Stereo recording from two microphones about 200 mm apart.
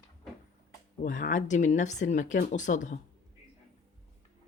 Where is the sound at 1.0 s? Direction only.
40° left (ahead or behind).